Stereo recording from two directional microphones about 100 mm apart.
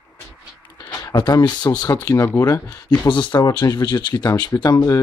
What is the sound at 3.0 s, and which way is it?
Speech, 50° left (ahead or behind).